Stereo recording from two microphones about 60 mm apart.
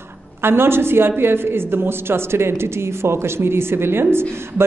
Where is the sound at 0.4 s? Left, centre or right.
Right.